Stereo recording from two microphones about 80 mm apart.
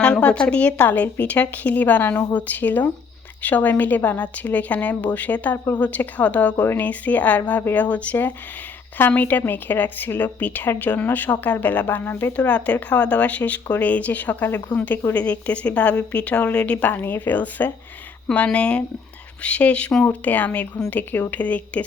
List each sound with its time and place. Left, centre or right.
0.0 s a woman's voice: centre